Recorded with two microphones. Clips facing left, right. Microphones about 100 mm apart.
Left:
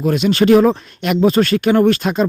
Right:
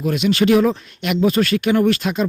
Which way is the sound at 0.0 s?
40° left (ahead or behind).